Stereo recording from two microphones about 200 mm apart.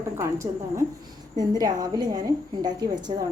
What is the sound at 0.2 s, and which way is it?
A woman's voice, 15° right (ahead or behind).